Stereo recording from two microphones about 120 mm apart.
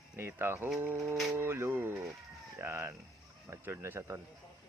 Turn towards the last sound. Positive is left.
turn(degrees=-20)  # may be behind; listen again after turning